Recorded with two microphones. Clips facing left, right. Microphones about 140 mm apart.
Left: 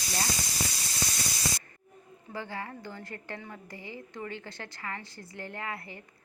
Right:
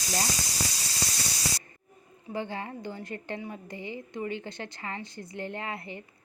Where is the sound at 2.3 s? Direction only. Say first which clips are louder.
Right 4 dB; 20° right (ahead or behind).